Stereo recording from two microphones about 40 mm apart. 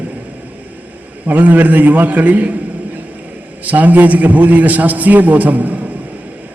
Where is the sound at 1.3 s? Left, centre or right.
Right.